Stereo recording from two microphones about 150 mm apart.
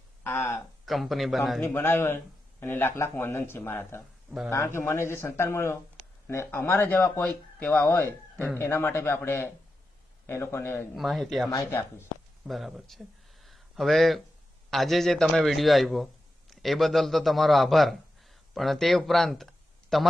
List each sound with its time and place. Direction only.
0.3 s speech: 15° left (ahead or behind)
0.9 s a man's voice: centre (ahead or behind)
1.6 s speech: 15° left (ahead or behind)
10.9 s a man's voice: centre (ahead or behind)
11.5 s speech: 15° left (ahead or behind)
12.5 s a man's voice: centre (ahead or behind)
13.4 s a sound: centre (ahead or behind)
14.7 s a man's voice: centre (ahead or behind)